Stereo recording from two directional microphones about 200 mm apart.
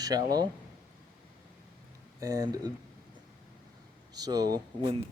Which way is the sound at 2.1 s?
15° right (ahead or behind).